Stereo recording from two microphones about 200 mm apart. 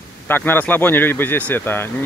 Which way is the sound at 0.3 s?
10° left (ahead or behind).